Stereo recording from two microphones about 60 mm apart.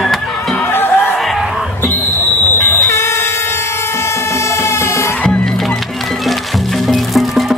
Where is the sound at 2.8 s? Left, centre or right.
Left.